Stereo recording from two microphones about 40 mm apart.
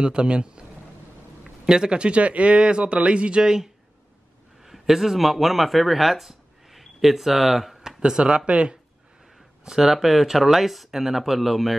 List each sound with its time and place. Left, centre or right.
0.0 s speech: right
1.7 s speech: right; by 8.0 s centre
8.1 s speech: centre
8.5 s speech: right
9.7 s speech: centre